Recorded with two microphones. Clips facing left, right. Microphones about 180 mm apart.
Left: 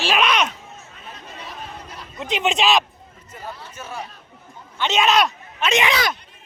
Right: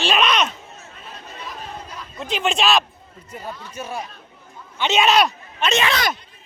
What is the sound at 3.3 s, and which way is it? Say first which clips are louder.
Speech: right 2 dB; 15° right (ahead or behind).